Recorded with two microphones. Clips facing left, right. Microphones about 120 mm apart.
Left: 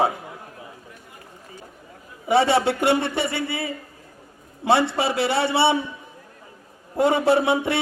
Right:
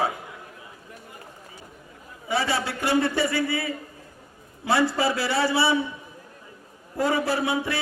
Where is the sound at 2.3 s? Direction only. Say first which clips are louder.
Left 8 dB; 25° left (ahead or behind).